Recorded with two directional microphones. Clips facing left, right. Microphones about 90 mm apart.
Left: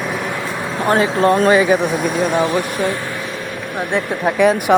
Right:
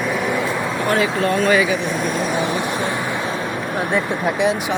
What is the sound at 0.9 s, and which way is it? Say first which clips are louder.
Speech: left 5 dB; 30° left (ahead or behind).